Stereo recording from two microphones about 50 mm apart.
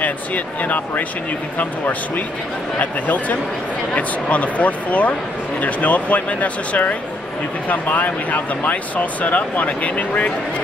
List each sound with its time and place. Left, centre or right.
0.0 s speech: left